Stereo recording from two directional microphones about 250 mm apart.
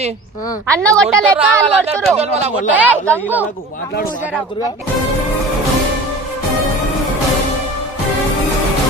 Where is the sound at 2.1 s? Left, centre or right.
Right.